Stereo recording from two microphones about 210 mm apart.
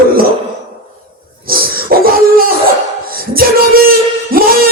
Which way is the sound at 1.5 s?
45° right (ahead or behind).